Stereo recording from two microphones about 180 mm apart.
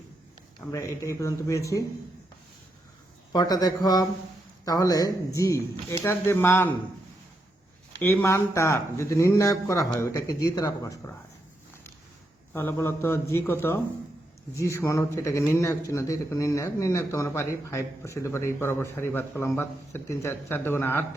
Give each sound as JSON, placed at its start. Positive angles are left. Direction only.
{"t": 0.7, "sound": "speech", "side_deg": 15}
{"t": 3.3, "sound": "a man's voice", "side_deg": 20}
{"t": 8.0, "sound": "speech", "side_deg": 15}
{"t": 12.5, "sound": "speech", "side_deg": 15}